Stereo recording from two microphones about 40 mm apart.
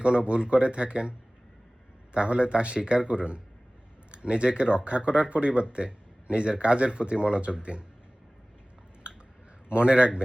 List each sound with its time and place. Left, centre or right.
0.0 s speech: right
2.1 s speech: right
9.6 s speech: right